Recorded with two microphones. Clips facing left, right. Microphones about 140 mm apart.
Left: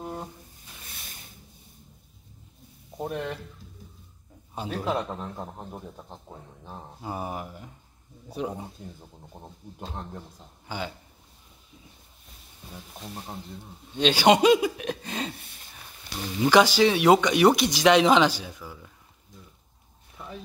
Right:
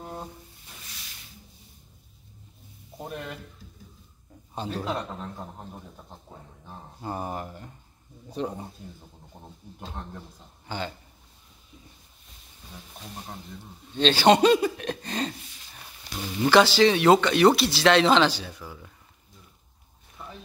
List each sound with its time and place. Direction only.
0.0 s a sound: 10° left (ahead or behind)
0.8 s a sound: 50° left (ahead or behind)
4.6 s speech: 10° left (ahead or behind)
7.0 s speech: 5° left (ahead or behind)
10.7 s speech: 10° left (ahead or behind)
13.9 s speech: 10° left (ahead or behind)
15.7 s a sound: centre (ahead or behind)
16.4 s speech: 10° left (ahead or behind)
18.6 s speech: 5° right (ahead or behind)